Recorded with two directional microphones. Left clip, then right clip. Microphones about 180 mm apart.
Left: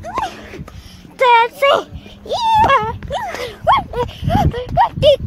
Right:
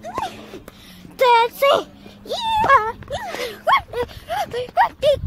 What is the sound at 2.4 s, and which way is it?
Wail, 15° left (ahead or behind).